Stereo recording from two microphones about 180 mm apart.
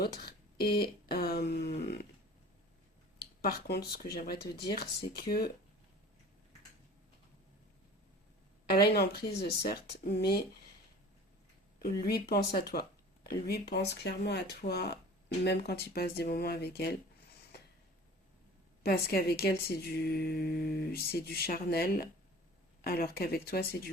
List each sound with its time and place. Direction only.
0.0 s speech: 60° left (ahead or behind)
3.4 s speech: 60° left (ahead or behind)
8.7 s speech: 60° left (ahead or behind)
11.8 s speech: 60° left (ahead or behind)
18.9 s speech: 60° left (ahead or behind)